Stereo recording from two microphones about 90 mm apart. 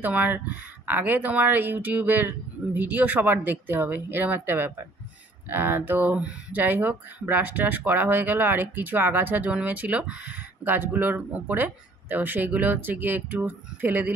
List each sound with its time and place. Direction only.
0.0 s speech: 20° right (ahead or behind)